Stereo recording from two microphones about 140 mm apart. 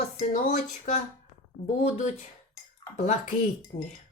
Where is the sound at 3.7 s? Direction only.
55° left (ahead or behind).